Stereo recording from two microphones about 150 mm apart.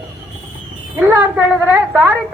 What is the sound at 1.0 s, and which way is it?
A woman's voice, 10° right (ahead or behind).